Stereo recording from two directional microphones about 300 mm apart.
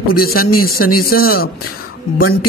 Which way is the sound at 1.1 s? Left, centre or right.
Left.